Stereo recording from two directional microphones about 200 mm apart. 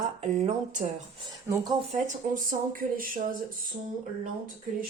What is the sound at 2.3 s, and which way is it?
Speech, 45° right (ahead or behind).